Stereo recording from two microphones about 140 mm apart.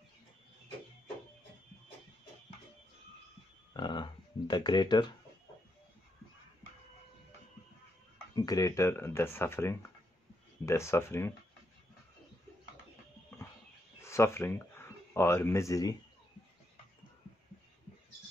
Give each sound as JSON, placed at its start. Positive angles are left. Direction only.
{"t": 3.7, "sound": "speech", "side_deg": 35}
{"t": 8.4, "sound": "speech", "side_deg": 25}
{"t": 14.0, "sound": "speech", "side_deg": 20}